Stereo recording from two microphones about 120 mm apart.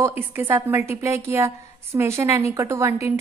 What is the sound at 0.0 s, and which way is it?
A woman's voice, 15° right (ahead or behind).